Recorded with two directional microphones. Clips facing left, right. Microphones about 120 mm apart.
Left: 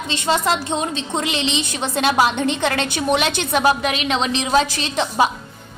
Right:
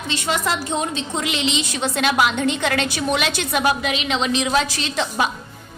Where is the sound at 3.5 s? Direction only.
40° left (ahead or behind).